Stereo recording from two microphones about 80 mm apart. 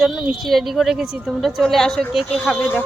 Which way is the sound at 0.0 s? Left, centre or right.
Centre.